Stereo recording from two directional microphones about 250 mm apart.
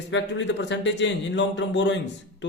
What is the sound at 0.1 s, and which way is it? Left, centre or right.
Speech, left.